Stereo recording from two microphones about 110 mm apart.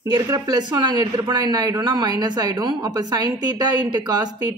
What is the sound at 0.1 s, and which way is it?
Speech, 35° right (ahead or behind).